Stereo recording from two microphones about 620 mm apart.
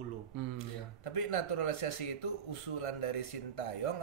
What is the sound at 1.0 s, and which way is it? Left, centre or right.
Speech, left.